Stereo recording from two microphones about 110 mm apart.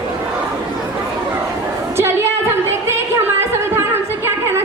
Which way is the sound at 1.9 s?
20° right (ahead or behind).